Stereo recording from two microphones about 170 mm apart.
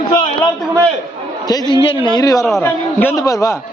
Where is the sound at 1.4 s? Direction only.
25° left (ahead or behind).